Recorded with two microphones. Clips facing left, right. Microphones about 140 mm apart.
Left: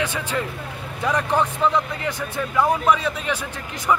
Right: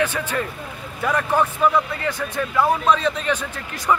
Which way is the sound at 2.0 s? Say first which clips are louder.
Right 2 dB; 15° left (ahead or behind).